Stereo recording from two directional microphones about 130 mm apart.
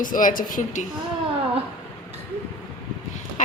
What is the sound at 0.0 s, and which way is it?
Speech, 90° left.